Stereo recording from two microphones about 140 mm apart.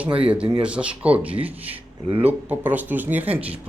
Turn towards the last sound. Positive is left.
turn(degrees=-10)  # may be behind; listen again after turning